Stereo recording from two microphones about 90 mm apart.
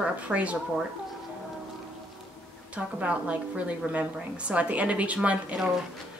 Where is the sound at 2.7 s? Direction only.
15° right (ahead or behind).